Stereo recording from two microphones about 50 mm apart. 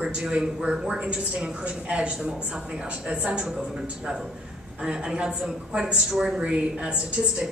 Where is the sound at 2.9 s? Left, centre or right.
Right.